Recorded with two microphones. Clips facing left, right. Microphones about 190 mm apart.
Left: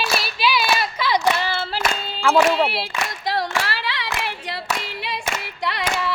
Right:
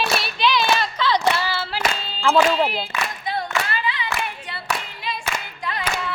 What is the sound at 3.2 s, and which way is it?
Singing, 85° left.